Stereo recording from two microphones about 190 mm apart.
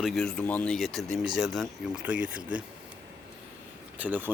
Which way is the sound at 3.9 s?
10° right (ahead or behind).